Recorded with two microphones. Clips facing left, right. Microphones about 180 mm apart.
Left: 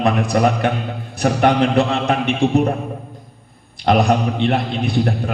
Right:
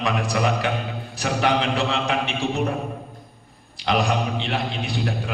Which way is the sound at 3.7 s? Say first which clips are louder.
Left 7 dB; 55° left (ahead or behind).